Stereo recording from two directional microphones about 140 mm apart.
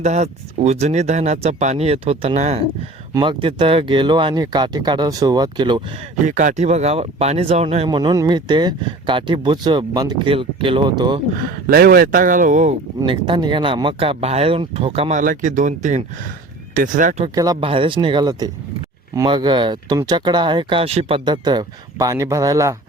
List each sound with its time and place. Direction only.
0.0 s speech: 55° right (ahead or behind)
3.1 s speech: 35° right (ahead or behind)
6.2 s speech: 65° right (ahead or behind)
7.9 s speech: 30° right (ahead or behind)
10.3 s speech: 40° right (ahead or behind)
11.5 s speech: 90° right; by 12.7 s 65° right (ahead or behind)
13.1 s speech: 35° right (ahead or behind)
15.1 s speech: 70° right (ahead or behind)
17.2 s speech: 25° right (ahead or behind)
17.6 s speech: 40° right (ahead or behind)
21.2 s speech: 30° right (ahead or behind)